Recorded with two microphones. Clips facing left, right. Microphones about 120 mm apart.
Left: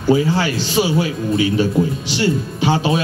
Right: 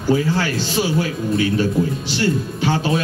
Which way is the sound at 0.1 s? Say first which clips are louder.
Left 3 dB; 15° left (ahead or behind).